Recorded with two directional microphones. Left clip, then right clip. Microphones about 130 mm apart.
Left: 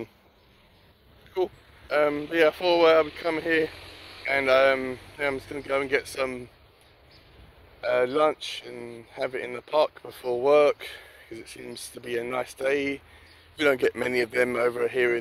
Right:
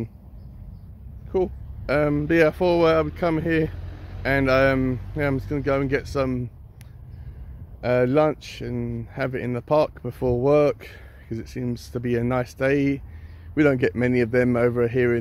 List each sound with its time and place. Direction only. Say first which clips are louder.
1.9 s speech: right 3 dB; 25° right (ahead or behind); by 6.4 s 45° right (ahead or behind)
7.8 s speech: right 3 dB; 55° right (ahead or behind)
13.6 s speech: right 3 dB; 30° right (ahead or behind)